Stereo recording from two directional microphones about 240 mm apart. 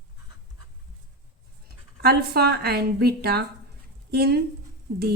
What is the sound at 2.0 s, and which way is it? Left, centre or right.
A woman's voice, right.